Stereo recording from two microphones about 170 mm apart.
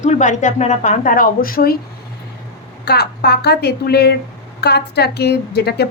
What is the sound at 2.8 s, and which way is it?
A woman's voice, 75° left (ahead or behind).